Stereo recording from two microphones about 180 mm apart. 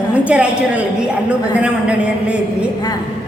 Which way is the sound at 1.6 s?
5° right (ahead or behind).